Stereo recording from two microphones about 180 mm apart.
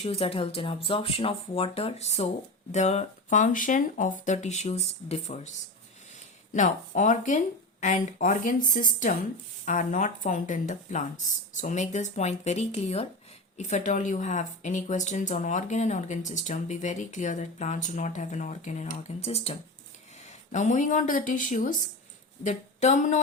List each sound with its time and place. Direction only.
0.0 s speech: 35° left (ahead or behind)
6.5 s a woman's voice: 45° left (ahead or behind)